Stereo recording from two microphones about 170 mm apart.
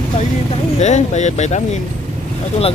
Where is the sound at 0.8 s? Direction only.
40° left (ahead or behind).